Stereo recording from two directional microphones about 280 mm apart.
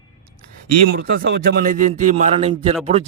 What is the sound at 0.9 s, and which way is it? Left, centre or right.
A man's voice, right.